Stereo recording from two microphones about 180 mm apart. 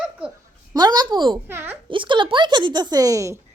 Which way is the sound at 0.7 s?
25° right (ahead or behind).